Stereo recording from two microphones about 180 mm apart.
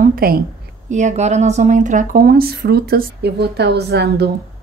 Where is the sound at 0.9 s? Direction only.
40° right (ahead or behind); by 4.3 s 65° right (ahead or behind).